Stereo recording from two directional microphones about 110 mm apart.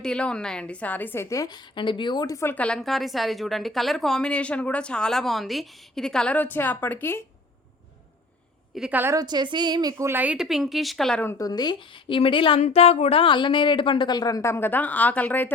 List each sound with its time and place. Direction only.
0.0 s a woman's voice: 5° left (ahead or behind); by 1.5 s 30° left (ahead or behind)
1.7 s a woman's voice: 45° left (ahead or behind); by 2.6 s 25° left (ahead or behind)
2.6 s a woman's voice: 5° left (ahead or behind)
8.9 s speech: 20° right (ahead or behind)
9.1 s a woman's voice: 40° right (ahead or behind)
10.0 s speech: 20° right (ahead or behind)
10.3 s speech: 5° right (ahead or behind)
11.3 s a woman's voice: 35° left (ahead or behind)
12.6 s a woman's voice: 75° left (ahead or behind); by 15.5 s 15° left (ahead or behind)